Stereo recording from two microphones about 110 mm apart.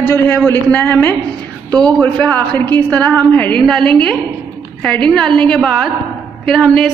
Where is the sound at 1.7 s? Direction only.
40° right (ahead or behind).